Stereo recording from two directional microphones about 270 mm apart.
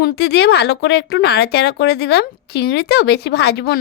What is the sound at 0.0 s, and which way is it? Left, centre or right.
Speech, left.